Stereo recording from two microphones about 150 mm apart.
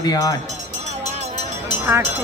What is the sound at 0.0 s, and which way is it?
Speech, 25° left (ahead or behind).